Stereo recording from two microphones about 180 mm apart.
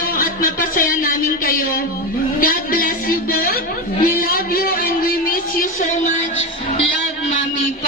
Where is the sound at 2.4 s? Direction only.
55° left (ahead or behind).